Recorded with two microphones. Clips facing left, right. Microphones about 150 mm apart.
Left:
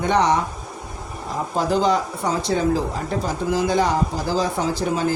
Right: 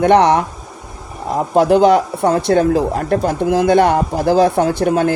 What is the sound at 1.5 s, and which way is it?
A woman's voice, 60° right (ahead or behind).